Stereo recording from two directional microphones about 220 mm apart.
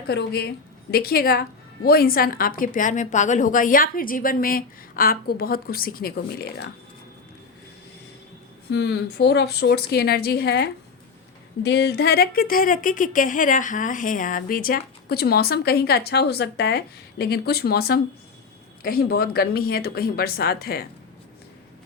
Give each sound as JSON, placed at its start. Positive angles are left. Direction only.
{"t": 0.1, "sound": "speech", "side_deg": 50}
{"t": 8.7, "sound": "speech", "side_deg": 50}